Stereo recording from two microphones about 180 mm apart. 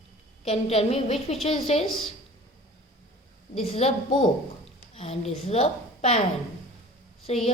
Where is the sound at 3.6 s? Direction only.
35° left (ahead or behind).